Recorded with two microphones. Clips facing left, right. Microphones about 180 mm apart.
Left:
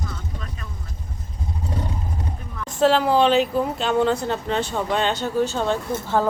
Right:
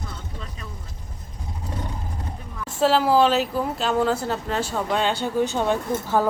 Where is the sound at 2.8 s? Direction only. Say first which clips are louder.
Left 1 dB; 5° right (ahead or behind).